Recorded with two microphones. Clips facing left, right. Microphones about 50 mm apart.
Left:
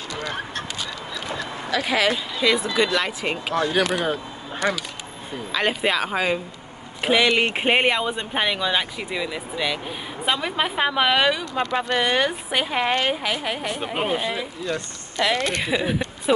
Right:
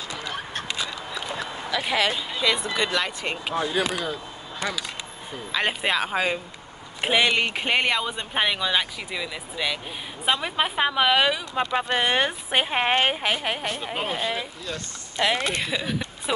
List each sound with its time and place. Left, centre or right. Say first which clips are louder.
1.9 s speech: left 2 dB; centre
3.5 s speech: left 4 dB; left
5.5 s speech: left 2 dB; centre
7.1 s speech: left 3 dB; centre
7.4 s speech: left 4 dB; left
8.4 s speech: even; centre
11.7 s speech: left 1 dB; centre; by 13.7 s right
13.7 s speech: left 4 dB; left
15.2 s speech: left 1 dB; centre
15.6 s speech: left 5 dB; centre